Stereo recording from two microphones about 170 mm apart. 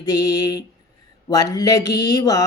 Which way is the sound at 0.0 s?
20° left (ahead or behind).